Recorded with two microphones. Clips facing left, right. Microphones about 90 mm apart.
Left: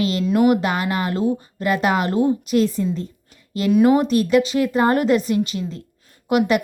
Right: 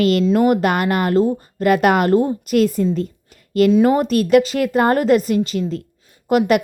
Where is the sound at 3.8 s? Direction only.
40° right (ahead or behind).